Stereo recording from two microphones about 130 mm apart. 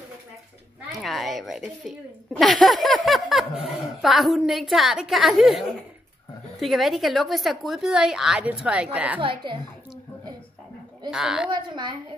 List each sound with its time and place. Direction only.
0.9 s a woman's voice: centre (ahead or behind)
9.2 s a woman's voice: 40° right (ahead or behind)
11.1 s a woman's voice: 5° right (ahead or behind)
11.5 s a woman's voice: 35° right (ahead or behind)